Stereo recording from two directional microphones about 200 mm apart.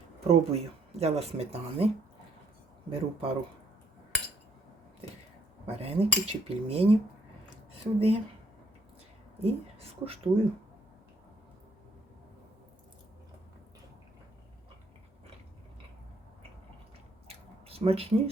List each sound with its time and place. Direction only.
0.3 s speech: 30° right (ahead or behind)
2.9 s cutlery: 30° right (ahead or behind)
5.6 s cutlery: 30° right (ahead or behind)
9.4 s cutlery: 30° right (ahead or behind)
17.2 s a sound: 30° right (ahead or behind)